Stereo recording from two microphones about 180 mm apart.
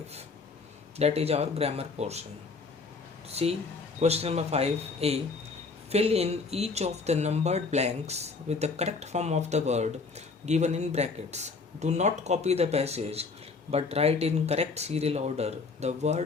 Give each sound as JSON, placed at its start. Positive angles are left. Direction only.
{"t": 0.9, "sound": "speech", "side_deg": -35}
{"t": 3.2, "sound": "speech", "side_deg": -35}